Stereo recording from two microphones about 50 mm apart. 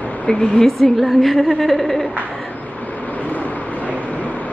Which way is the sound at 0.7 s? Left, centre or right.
Centre.